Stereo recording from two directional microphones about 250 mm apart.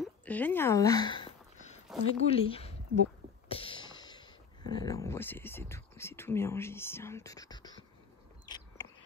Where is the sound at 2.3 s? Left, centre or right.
Left.